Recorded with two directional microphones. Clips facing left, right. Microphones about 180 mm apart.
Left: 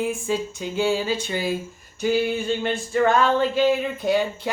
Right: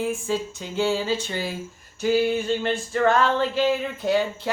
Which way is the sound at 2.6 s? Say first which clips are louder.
Left 2 dB; 10° left (ahead or behind).